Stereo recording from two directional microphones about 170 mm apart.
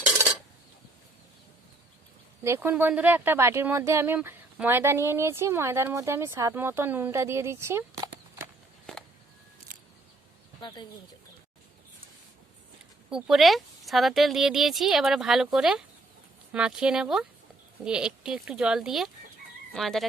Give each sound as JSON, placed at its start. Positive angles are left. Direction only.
{"t": 2.4, "sound": "speech", "side_deg": -15}
{"t": 10.6, "sound": "speech", "side_deg": 25}
{"t": 13.1, "sound": "speech", "side_deg": -5}